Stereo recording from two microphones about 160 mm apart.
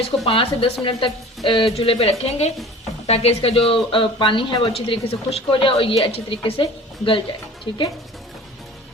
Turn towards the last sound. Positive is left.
turn(degrees=30)  # may be behind; listen again after turning